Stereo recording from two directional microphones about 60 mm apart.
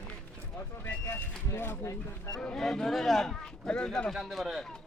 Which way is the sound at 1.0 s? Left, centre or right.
Left.